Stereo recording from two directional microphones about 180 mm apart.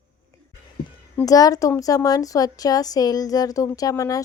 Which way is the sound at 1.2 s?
20° left (ahead or behind).